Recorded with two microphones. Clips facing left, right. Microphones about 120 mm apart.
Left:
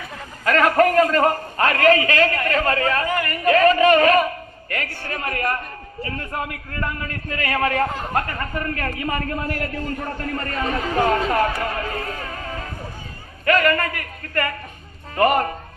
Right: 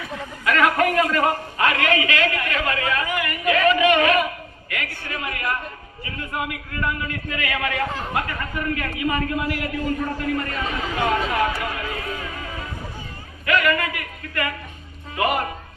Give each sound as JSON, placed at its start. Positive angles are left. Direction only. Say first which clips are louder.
{"t": 0.0, "sound": "a man's voice", "louder": "left 1 dB", "side_deg": 40}